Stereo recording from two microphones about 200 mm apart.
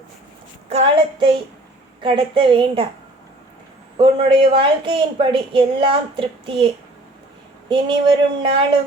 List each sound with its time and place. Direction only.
0.7 s a woman's voice: 30° right (ahead or behind)
3.9 s a woman's voice: 25° right (ahead or behind)
7.7 s a woman's voice: 25° right (ahead or behind)